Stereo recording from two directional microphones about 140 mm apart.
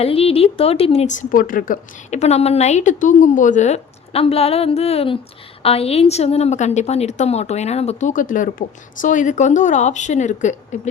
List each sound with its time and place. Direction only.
0.0 s a woman's voice: 45° left (ahead or behind)